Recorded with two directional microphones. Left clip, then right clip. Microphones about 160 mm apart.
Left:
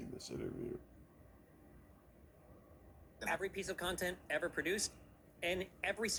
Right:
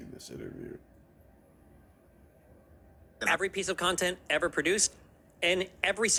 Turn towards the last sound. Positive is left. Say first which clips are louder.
# right 11 dB
turn(degrees=-30)  # may be behind; listen again after turning